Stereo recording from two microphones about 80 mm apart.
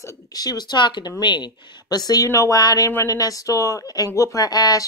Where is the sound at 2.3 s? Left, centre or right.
Left.